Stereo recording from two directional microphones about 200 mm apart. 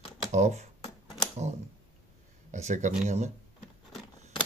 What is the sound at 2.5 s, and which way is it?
Speech, 35° right (ahead or behind).